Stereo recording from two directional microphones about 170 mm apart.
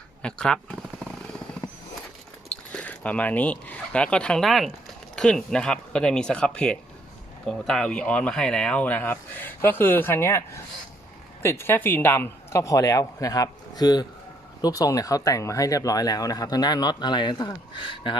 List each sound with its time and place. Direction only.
0.2 s speech: 5° left (ahead or behind)
2.7 s speech: 10° left (ahead or behind); by 17.5 s 25° left (ahead or behind)